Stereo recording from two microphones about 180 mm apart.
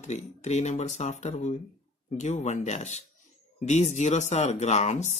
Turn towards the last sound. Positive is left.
turn(degrees=40)  # may be behind; listen again after turning